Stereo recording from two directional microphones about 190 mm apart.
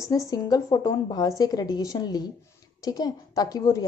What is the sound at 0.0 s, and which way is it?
A woman's voice, 15° left (ahead or behind).